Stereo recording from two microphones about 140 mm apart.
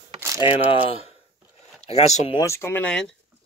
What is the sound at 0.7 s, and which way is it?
Speech, 45° left (ahead or behind).